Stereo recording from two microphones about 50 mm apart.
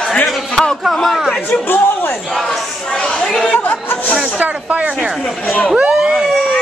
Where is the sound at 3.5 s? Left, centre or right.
Left.